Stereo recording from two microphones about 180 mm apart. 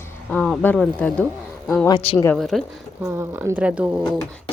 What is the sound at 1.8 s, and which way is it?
Speech, 30° left (ahead or behind).